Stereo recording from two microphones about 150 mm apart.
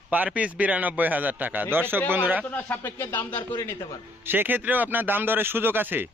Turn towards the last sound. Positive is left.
turn(degrees=-15)  # may be behind; listen again after turning